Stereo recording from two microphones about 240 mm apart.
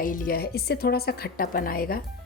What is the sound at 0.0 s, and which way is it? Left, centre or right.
A woman's voice, left.